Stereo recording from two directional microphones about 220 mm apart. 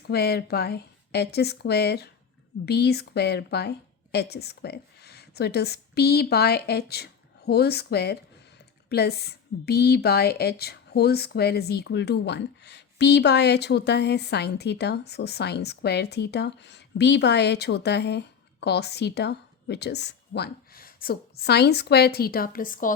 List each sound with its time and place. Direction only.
0.0 s a woman's voice: 45° left (ahead or behind)